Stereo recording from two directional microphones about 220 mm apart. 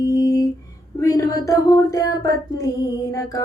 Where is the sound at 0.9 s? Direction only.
15° left (ahead or behind).